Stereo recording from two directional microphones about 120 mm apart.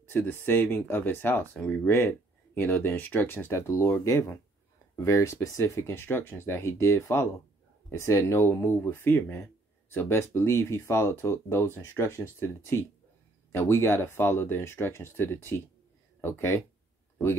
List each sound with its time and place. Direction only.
0.1 s speech: 15° left (ahead or behind)